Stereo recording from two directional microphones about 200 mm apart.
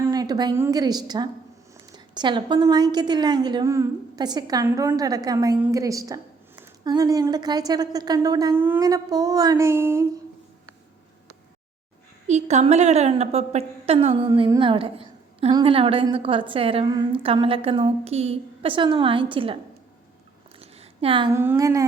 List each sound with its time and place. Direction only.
0.0 s a woman's voice: 20° right (ahead or behind)
12.3 s a woman's voice: 35° right (ahead or behind)
20.6 s a sound: 30° right (ahead or behind)
21.3 s a woman's voice: 15° right (ahead or behind)